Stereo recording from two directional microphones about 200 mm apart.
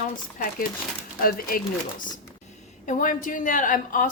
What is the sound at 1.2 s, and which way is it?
Speech, 45° left (ahead or behind).